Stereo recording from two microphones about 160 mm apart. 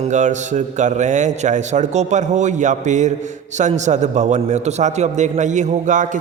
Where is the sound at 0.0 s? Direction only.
50° right (ahead or behind).